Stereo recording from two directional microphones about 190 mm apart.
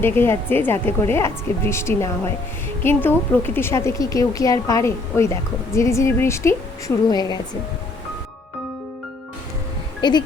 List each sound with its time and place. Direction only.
0.0 s a woman's voice: 10° left (ahead or behind)
10.0 s speech: 25° left (ahead or behind)